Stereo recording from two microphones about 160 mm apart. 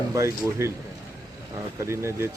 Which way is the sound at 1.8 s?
15° right (ahead or behind).